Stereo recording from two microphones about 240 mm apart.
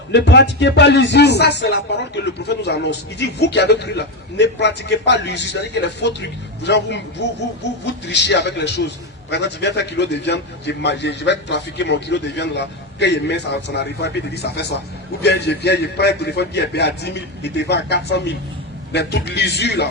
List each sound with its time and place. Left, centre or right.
0.1 s speech: left